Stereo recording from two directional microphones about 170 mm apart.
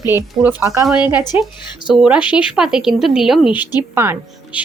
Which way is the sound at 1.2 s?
25° left (ahead or behind).